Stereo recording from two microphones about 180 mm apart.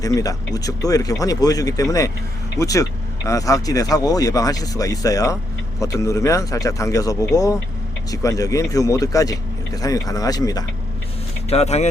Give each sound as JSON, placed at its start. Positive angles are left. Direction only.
{"t": 0.0, "sound": "speech", "side_deg": 20}
{"t": 11.4, "sound": "speech", "side_deg": 35}